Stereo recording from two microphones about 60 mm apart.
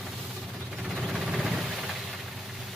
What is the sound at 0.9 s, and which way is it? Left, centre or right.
Vehicle, centre.